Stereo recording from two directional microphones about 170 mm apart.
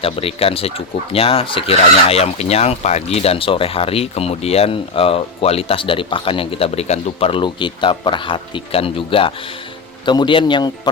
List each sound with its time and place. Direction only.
0.0 s a man's voice: 35° left (ahead or behind)